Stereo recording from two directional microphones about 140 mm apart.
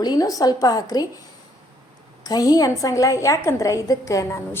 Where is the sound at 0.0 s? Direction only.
25° left (ahead or behind).